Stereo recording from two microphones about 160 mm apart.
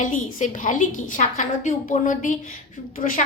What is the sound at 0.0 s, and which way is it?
A woman's voice, 50° left (ahead or behind).